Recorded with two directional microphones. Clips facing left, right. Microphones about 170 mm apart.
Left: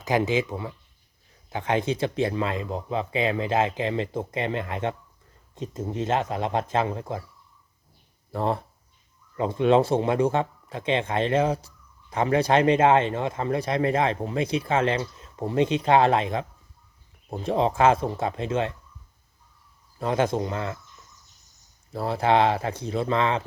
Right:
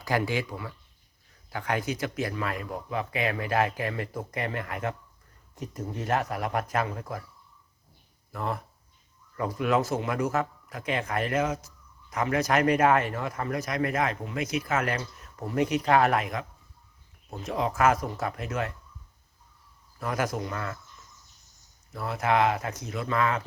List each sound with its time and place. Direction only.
0.0 s speech: 20° left (ahead or behind)
8.3 s speech: 30° left (ahead or behind)
20.0 s speech: 25° left (ahead or behind)
21.9 s speech: 30° left (ahead or behind)